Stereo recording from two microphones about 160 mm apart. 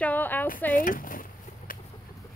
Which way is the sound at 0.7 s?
60° left (ahead or behind).